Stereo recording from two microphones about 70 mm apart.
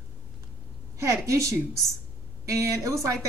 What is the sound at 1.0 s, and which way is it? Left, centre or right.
A woman's voice, right.